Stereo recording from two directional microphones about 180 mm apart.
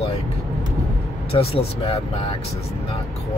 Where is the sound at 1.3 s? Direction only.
35° left (ahead or behind).